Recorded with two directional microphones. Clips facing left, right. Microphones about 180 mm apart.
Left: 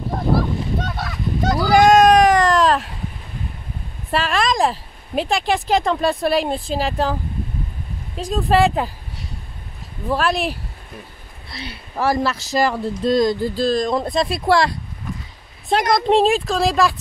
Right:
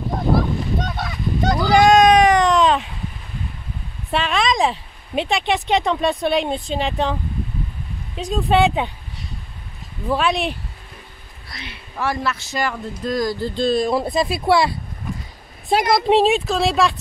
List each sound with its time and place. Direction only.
0.8 s honk: centre (ahead or behind)
4.1 s speech: centre (ahead or behind)
8.2 s speech: centre (ahead or behind)
10.0 s speech: centre (ahead or behind)
11.5 s speech: 35° left (ahead or behind)
13.6 s speech: 5° right (ahead or behind)